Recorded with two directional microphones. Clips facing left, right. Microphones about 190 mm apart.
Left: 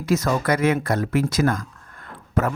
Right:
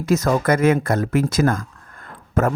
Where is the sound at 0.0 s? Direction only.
45° right (ahead or behind).